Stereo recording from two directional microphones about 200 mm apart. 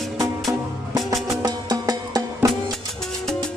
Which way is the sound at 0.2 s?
15° right (ahead or behind).